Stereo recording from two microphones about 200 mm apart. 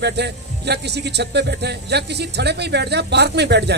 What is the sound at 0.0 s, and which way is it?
Speech, 55° right (ahead or behind).